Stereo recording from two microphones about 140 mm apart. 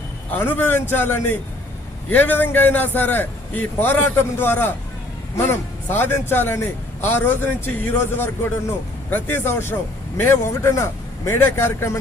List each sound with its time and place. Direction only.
0.3 s a man's voice: 15° left (ahead or behind)